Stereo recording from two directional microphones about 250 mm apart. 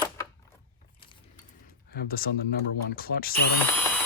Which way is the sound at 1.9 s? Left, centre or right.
Left.